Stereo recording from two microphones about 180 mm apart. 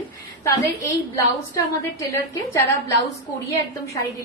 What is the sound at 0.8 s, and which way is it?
A woman's voice, 15° left (ahead or behind).